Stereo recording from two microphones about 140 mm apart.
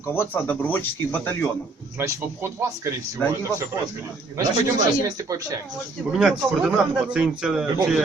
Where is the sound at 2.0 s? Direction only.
20° right (ahead or behind).